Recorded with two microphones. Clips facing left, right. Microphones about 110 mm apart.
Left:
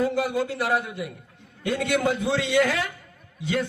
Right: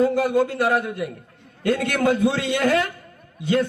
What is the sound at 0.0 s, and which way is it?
A man's voice, 50° right (ahead or behind).